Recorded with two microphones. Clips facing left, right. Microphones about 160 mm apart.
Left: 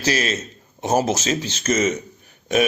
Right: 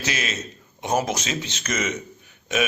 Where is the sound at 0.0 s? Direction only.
35° left (ahead or behind).